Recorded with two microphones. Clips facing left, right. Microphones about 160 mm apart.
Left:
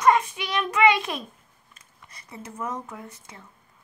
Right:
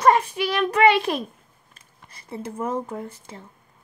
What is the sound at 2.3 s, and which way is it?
Speech, 30° right (ahead or behind).